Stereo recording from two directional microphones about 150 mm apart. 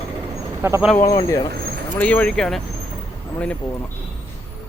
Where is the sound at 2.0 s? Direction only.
10° left (ahead or behind).